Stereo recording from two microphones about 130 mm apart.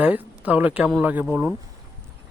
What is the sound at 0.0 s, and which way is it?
Speech, 10° right (ahead or behind).